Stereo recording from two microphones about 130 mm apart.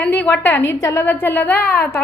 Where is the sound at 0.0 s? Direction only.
15° left (ahead or behind).